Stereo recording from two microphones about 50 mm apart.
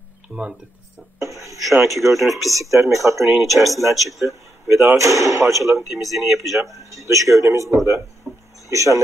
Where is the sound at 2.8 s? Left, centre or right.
Right.